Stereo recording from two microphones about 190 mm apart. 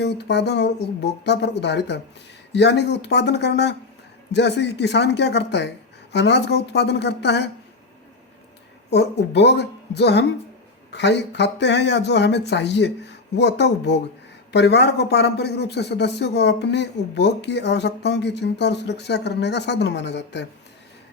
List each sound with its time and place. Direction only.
0.0 s speech: 60° left (ahead or behind)
8.9 s speech: 60° left (ahead or behind)